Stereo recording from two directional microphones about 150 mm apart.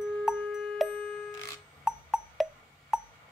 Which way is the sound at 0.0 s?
5° right (ahead or behind).